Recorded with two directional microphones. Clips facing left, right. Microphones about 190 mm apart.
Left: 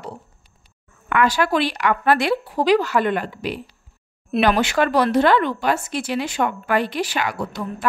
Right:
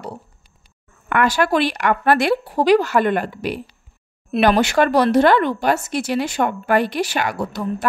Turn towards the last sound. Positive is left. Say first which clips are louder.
# right 2 dB
turn(degrees=-45)  # may be behind; listen again after turning